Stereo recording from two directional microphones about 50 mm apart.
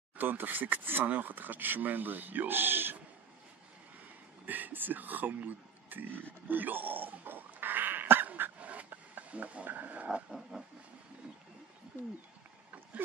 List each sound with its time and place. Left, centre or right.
0.2 s speech: right
4.5 s speech: right
6.5 s a sound: right
8.5 s a sound: right
9.7 s speech: right
10.5 s vehicle: centre